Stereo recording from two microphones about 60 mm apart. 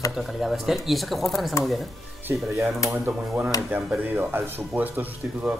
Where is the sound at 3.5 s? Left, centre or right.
Left.